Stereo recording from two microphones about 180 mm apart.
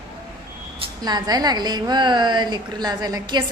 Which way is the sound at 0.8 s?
20° right (ahead or behind).